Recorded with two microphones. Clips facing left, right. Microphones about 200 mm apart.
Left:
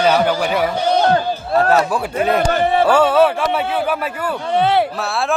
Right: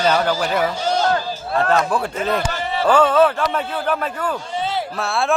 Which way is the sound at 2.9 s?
10° left (ahead or behind).